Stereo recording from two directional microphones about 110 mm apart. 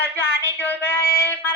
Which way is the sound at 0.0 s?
20° left (ahead or behind).